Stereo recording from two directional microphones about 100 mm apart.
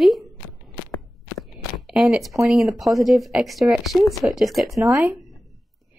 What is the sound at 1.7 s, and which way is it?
A woman's voice, 5° right (ahead or behind).